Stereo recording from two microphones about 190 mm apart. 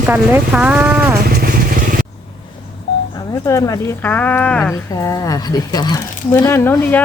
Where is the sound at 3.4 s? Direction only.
15° left (ahead or behind).